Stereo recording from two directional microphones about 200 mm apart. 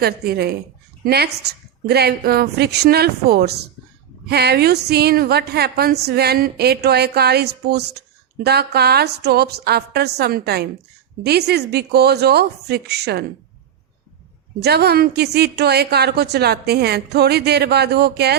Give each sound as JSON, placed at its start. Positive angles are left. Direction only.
{"t": 0.0, "sound": "a woman's voice", "side_deg": -55}
{"t": 14.6, "sound": "a woman's voice", "side_deg": -55}